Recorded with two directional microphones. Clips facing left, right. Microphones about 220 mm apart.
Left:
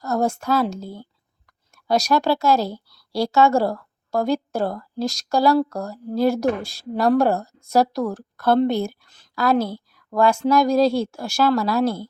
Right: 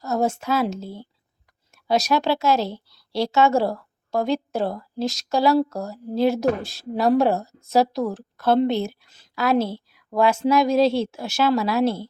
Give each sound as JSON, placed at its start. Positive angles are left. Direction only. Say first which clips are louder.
{"t": 0.0, "sound": "speech", "louder": "left 1 dB", "side_deg": -5}
{"t": 2.6, "sound": "a woman's voice", "louder": "left 1 dB", "side_deg": -25}
{"t": 3.3, "sound": "a woman's voice", "louder": "left 2 dB", "side_deg": 0}
{"t": 9.6, "sound": "a woman's voice", "louder": "even", "side_deg": -25}
{"t": 9.9, "sound": "speech", "louder": "left 2 dB", "side_deg": -5}